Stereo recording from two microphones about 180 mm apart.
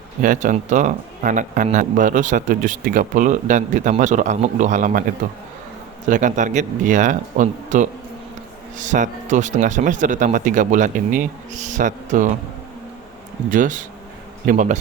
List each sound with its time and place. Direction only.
0.2 s speech: 45° right (ahead or behind)
6.1 s speech: 45° right (ahead or behind)
13.5 s speech: 45° right (ahead or behind)